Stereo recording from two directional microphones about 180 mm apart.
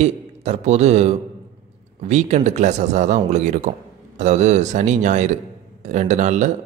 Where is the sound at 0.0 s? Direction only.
40° right (ahead or behind).